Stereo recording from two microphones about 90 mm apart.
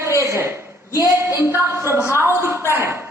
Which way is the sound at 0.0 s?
30° right (ahead or behind).